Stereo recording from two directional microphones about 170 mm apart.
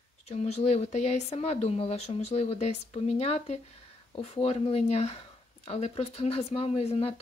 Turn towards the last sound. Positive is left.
turn(degrees=35)  # may be behind; listen again after turning